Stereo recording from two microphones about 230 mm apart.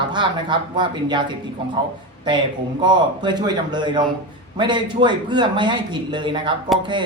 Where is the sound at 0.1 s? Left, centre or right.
Centre.